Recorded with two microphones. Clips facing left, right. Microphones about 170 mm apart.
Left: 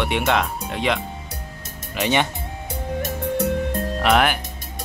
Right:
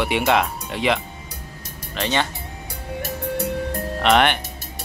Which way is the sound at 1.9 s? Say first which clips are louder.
Left 2 dB; 15° left (ahead or behind).